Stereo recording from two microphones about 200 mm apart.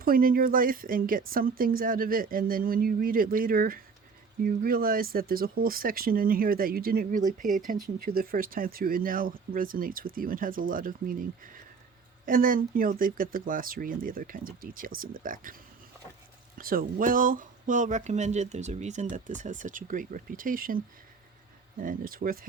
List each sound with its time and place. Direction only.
0.0 s speech: 45° right (ahead or behind)
16.6 s speech: 45° right (ahead or behind)